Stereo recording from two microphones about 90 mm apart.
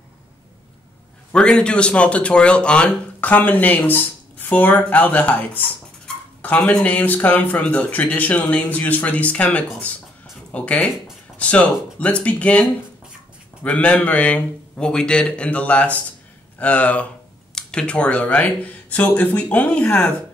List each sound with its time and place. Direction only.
1.3 s speech: 10° left (ahead or behind)